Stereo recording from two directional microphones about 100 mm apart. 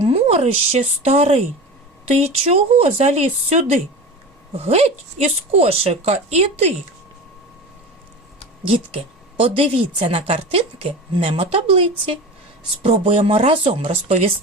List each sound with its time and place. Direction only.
0.0 s speech: 90° right
9.4 s a woman's voice: 75° right (ahead or behind)